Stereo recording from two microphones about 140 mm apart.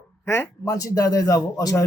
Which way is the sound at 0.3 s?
20° left (ahead or behind).